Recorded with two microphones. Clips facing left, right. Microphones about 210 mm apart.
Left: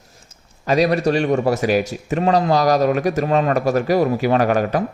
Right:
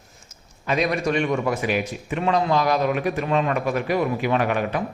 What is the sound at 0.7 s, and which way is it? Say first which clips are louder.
Speech: left 6 dB; 35° left (ahead or behind).